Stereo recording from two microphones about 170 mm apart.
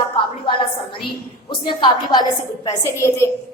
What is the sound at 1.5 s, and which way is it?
Speech, 30° left (ahead or behind).